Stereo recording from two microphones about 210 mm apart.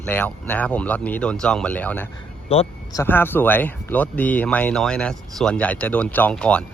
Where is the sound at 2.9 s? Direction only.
10° left (ahead or behind).